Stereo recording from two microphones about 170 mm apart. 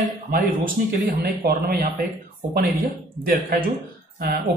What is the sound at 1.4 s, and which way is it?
Speech, 60° right (ahead or behind).